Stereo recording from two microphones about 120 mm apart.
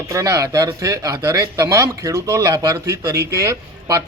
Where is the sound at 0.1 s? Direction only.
25° right (ahead or behind).